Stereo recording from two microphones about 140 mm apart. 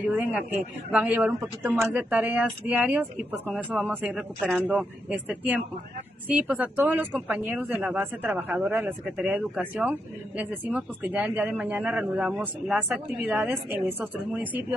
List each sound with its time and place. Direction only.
0.0 s speech: 10° right (ahead or behind)